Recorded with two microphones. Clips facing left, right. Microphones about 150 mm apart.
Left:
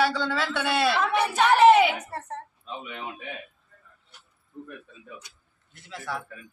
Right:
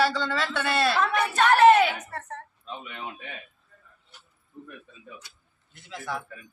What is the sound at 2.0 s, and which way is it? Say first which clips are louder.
Speech: left 2 dB; 30° left (ahead or behind).